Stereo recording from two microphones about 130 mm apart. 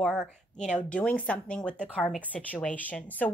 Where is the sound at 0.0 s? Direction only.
Centre (ahead or behind).